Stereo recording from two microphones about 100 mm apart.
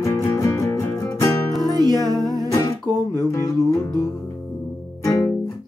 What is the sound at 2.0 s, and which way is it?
Music, 40° right (ahead or behind).